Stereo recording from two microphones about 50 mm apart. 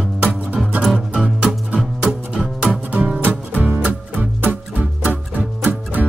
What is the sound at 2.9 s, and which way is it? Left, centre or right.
Music, right.